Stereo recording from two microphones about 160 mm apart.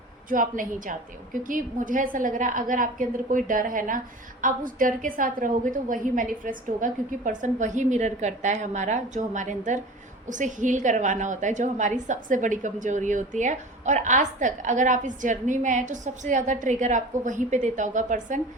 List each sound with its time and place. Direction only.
0.3 s a woman's voice: 55° right (ahead or behind)